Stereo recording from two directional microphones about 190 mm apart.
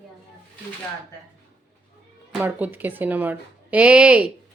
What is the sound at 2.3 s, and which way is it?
Speech, 10° right (ahead or behind).